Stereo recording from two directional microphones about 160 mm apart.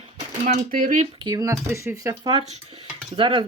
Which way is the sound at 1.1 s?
25° right (ahead or behind).